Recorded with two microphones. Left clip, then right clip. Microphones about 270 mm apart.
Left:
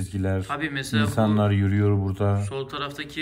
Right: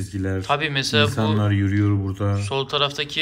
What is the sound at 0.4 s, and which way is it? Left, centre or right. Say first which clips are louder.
Speech: right 7 dB; centre.